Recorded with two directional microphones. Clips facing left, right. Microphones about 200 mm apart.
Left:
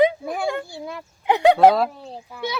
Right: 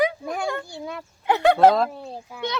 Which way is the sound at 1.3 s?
15° left (ahead or behind).